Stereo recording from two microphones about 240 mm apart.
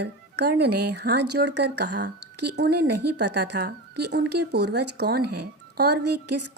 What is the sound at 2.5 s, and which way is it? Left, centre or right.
Speech, right.